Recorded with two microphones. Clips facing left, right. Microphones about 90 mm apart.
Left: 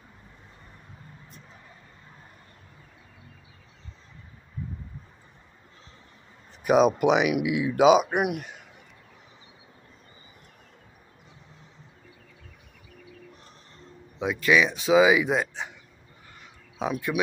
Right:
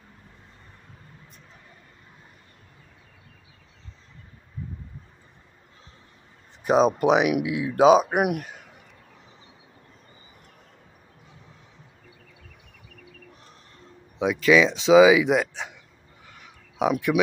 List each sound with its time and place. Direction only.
6.6 s speech: 35° right (ahead or behind)
8.1 s speech: 50° right (ahead or behind)
14.2 s speech: 90° right
16.7 s speech: 85° right